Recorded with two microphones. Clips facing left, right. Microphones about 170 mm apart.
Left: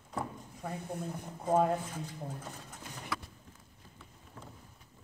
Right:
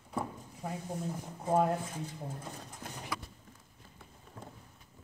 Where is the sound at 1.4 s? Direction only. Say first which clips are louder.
Left 1 dB; 5° right (ahead or behind).